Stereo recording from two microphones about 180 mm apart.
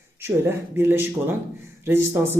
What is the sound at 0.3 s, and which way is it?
Speech, 15° right (ahead or behind).